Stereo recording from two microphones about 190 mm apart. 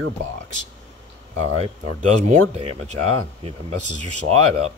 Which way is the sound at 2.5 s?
35° right (ahead or behind).